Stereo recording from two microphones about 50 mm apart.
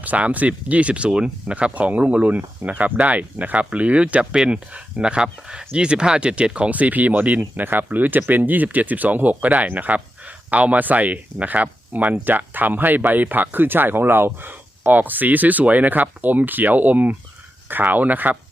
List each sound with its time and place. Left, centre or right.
0.0 s speech: right
6.7 s speech: right